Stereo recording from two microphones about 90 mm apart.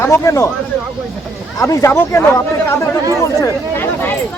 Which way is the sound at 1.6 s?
35° left (ahead or behind).